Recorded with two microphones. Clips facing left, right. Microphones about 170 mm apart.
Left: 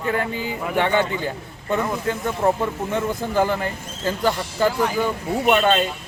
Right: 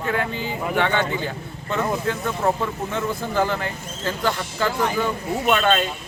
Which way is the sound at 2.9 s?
15° left (ahead or behind).